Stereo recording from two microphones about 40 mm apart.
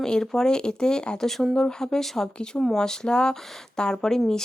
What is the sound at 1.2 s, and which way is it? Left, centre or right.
Speech, centre.